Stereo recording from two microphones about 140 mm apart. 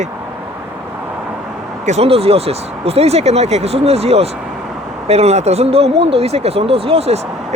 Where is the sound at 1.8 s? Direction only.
50° right (ahead or behind).